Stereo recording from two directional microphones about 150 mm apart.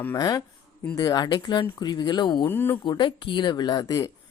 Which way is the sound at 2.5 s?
15° left (ahead or behind).